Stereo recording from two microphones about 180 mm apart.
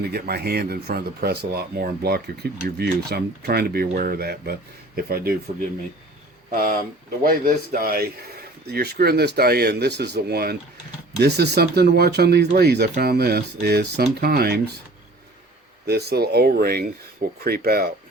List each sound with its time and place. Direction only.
0.0 s speech: 60° right (ahead or behind)
6.5 s speech: 50° right (ahead or behind)
15.9 s speech: 65° right (ahead or behind)